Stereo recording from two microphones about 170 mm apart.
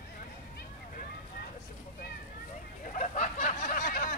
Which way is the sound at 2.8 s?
50° left (ahead or behind).